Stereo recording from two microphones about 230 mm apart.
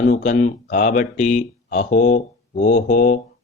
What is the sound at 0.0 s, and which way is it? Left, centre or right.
Speech, left.